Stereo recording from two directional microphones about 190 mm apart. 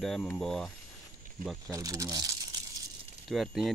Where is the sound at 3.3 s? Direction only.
Centre (ahead or behind).